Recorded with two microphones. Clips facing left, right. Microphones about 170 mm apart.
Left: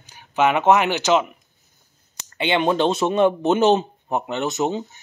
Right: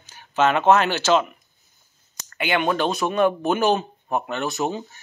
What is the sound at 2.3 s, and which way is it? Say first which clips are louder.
Speech: left 2 dB; 25° left (ahead or behind).